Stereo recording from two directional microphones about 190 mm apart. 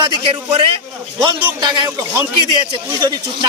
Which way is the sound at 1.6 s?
25° right (ahead or behind).